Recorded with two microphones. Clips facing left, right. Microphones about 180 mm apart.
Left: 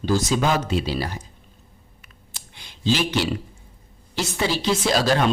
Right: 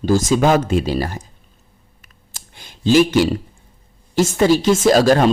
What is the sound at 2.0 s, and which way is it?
Computer keyboard, 45° right (ahead or behind).